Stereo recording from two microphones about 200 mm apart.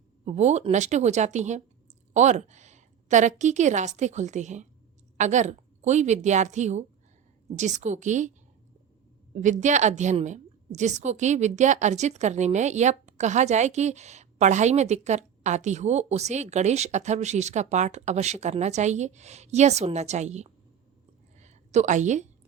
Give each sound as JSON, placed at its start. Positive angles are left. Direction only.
{"t": 0.3, "sound": "a woman's voice", "side_deg": -35}
{"t": 9.3, "sound": "a woman's voice", "side_deg": -40}
{"t": 21.3, "sound": "a sound", "side_deg": -35}